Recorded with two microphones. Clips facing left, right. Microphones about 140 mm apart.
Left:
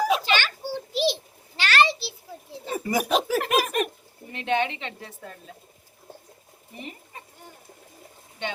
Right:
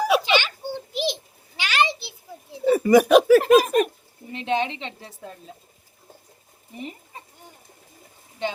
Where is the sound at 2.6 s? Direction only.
70° right (ahead or behind).